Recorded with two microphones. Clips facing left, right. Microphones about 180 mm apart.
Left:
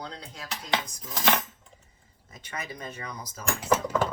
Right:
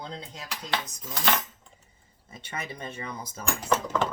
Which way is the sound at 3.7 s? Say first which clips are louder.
Left 2 dB; 10° left (ahead or behind).